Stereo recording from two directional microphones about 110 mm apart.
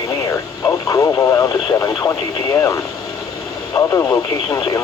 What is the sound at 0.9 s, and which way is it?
Speech, 25° left (ahead or behind).